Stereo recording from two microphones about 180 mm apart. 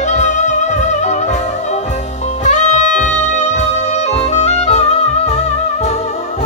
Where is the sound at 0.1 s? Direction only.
40° left (ahead or behind).